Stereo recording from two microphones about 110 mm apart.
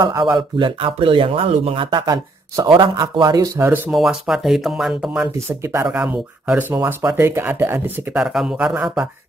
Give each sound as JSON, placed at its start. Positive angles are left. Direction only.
{"t": 0.2, "sound": "a man's voice", "side_deg": -45}
{"t": 3.5, "sound": "speech", "side_deg": -20}
{"t": 3.9, "sound": "speech", "side_deg": 0}
{"t": 6.0, "sound": "speech", "side_deg": -15}
{"t": 8.1, "sound": "speech", "side_deg": -5}